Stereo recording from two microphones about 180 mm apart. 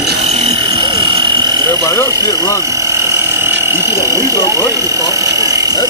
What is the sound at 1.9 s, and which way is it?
Speech, 15° left (ahead or behind).